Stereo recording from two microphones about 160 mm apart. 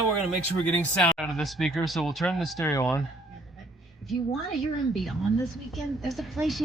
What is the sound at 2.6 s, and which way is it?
Speech, 15° left (ahead or behind).